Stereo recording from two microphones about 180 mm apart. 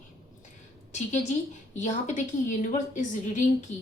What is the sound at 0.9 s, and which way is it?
Speech, 40° left (ahead or behind).